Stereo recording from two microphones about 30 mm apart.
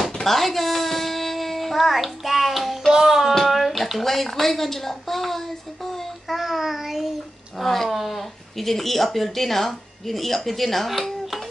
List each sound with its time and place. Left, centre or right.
0.0 s speech: centre
3.1 s child singing: centre
3.5 s speech: centre
6.3 s child singing: centre
7.6 s speech: centre